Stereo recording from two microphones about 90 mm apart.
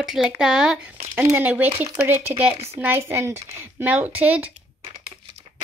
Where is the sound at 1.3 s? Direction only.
20° right (ahead or behind).